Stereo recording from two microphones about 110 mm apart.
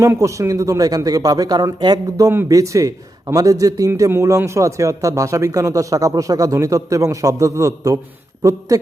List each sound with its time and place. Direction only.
0.0 s a man's voice: 25° right (ahead or behind)